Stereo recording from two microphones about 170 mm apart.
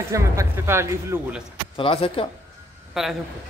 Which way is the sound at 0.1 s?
15° right (ahead or behind).